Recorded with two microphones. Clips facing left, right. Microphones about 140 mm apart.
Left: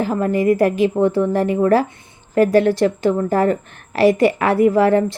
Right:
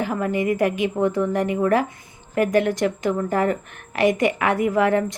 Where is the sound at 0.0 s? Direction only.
35° left (ahead or behind).